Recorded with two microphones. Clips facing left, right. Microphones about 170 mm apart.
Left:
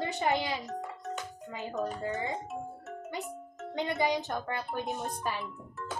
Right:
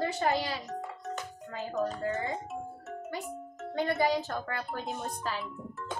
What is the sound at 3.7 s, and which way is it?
Speech, 20° left (ahead or behind).